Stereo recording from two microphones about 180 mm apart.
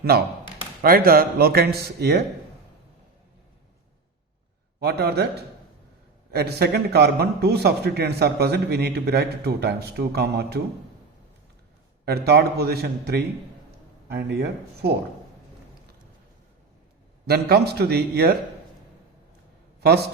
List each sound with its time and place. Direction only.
0.8 s a man's voice: 55° right (ahead or behind)
4.8 s a man's voice: 65° right (ahead or behind)
6.3 s a man's voice: 65° right (ahead or behind)
12.0 s a man's voice: 60° right (ahead or behind)
17.2 s a man's voice: 60° right (ahead or behind)
19.8 s a man's voice: 65° right (ahead or behind)